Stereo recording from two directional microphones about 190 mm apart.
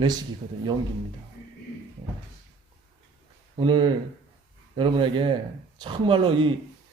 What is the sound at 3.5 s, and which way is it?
Speech, 25° right (ahead or behind).